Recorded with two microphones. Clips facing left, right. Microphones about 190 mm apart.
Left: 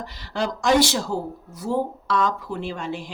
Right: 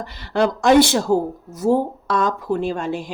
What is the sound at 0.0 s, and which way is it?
Speech, 60° right (ahead or behind).